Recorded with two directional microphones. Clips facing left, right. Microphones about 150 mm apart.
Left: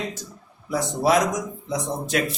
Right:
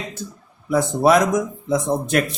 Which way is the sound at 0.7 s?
55° right (ahead or behind).